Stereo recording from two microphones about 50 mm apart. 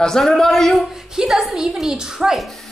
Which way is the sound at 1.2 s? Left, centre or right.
Centre.